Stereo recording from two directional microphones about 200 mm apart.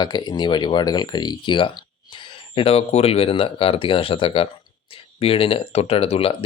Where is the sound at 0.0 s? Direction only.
20° left (ahead or behind).